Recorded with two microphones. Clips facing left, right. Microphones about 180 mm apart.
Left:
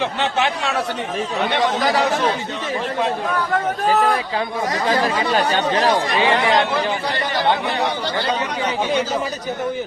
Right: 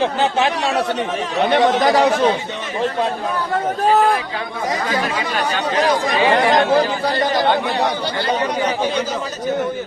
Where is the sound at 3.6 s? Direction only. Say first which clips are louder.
Right 4 dB; 30° right (ahead or behind).